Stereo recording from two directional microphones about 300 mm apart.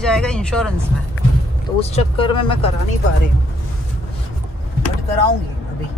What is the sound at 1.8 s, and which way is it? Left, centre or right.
Speech, centre.